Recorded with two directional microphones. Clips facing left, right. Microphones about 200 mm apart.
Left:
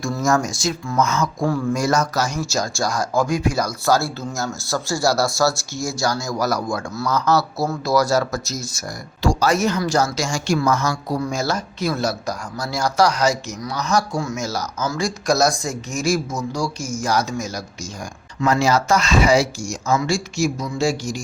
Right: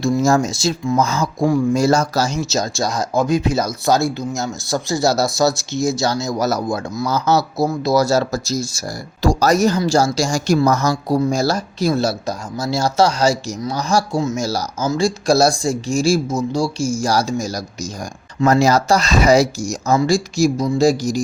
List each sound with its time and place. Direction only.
0.0 s speech: 25° right (ahead or behind)